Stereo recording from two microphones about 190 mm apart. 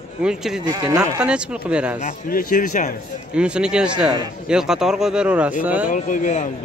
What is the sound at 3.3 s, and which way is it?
A man's voice, 5° right (ahead or behind).